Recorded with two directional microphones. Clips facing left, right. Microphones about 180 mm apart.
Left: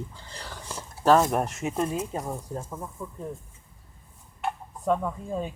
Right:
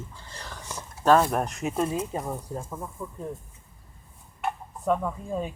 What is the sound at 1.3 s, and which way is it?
Speech, 5° left (ahead or behind).